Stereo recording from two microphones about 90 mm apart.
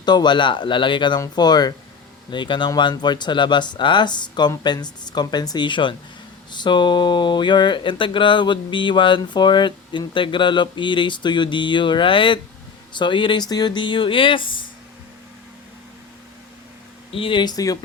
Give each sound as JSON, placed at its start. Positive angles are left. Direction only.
{"t": 0.0, "sound": "speech", "side_deg": 55}
{"t": 1.4, "sound": "speech", "side_deg": 50}
{"t": 17.1, "sound": "speech", "side_deg": 85}
{"t": 17.4, "sound": "speech", "side_deg": 45}